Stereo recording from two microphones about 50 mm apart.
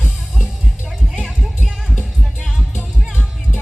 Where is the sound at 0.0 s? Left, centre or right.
Right.